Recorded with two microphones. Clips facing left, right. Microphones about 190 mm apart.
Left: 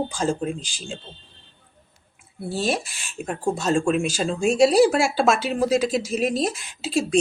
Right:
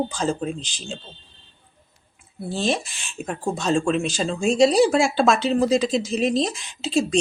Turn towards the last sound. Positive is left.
turn(degrees=5)  # may be behind; listen again after turning